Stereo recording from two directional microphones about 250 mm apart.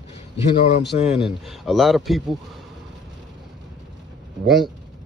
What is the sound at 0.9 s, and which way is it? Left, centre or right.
Speech, left.